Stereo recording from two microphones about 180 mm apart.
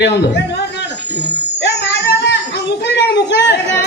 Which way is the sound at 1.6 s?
75° left (ahead or behind).